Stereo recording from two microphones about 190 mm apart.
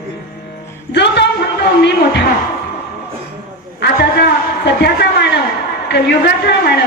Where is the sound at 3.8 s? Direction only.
60° left (ahead or behind).